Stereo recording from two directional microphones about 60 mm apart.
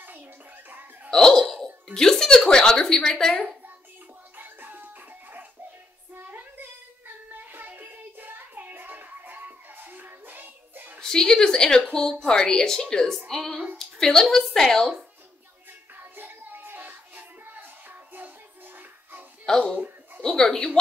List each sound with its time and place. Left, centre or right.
0.7 s speech: right
1.1 s a woman's voice: centre
4.4 s music: right
6.1 s child singing: right
7.3 s music: right
11.0 s a woman's voice: centre
16.0 s music: right
19.5 s a woman's voice: centre